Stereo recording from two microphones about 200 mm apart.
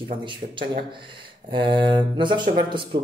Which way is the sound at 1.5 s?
25° right (ahead or behind).